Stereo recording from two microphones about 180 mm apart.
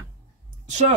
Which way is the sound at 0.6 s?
40° right (ahead or behind).